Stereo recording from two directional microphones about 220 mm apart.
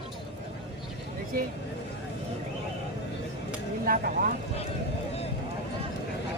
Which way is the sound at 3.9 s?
40° right (ahead or behind).